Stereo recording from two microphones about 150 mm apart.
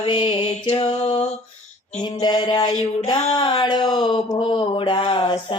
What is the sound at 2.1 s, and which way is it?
Mantra, 30° left (ahead or behind).